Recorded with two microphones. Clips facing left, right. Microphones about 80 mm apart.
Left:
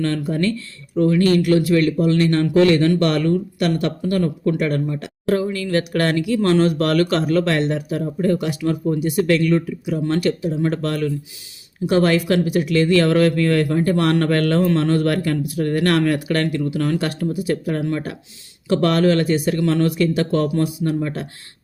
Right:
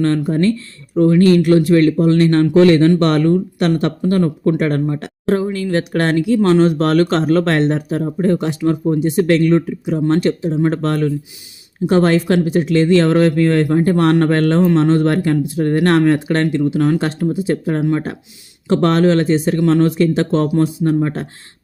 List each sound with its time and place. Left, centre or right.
0.0 s speech: right
5.2 s speech: right